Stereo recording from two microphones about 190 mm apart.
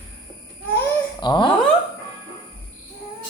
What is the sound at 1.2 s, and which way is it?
Speech, 25° left (ahead or behind).